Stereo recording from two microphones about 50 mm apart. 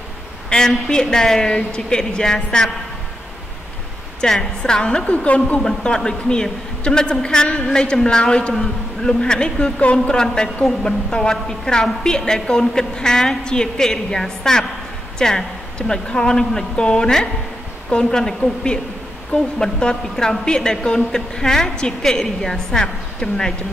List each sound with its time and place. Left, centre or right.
0.5 s a woman's voice: centre
4.2 s a woman's voice: centre
5.6 s a woman's voice: centre